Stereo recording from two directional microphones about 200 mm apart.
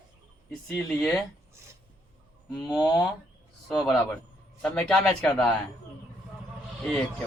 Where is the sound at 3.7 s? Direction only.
Centre (ahead or behind).